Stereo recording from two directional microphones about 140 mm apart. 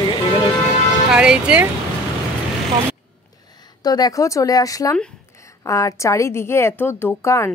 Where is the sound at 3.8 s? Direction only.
30° left (ahead or behind).